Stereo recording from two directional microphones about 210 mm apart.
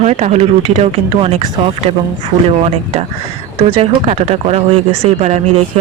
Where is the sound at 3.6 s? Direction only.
25° right (ahead or behind).